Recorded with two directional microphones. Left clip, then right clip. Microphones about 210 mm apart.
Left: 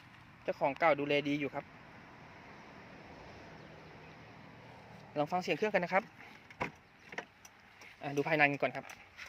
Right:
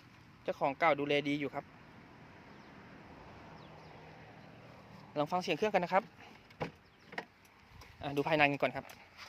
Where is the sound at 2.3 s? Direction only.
35° left (ahead or behind); by 4.3 s 55° left (ahead or behind).